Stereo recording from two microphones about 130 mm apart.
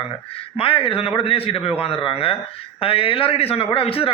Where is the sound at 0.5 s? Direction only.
45° left (ahead or behind).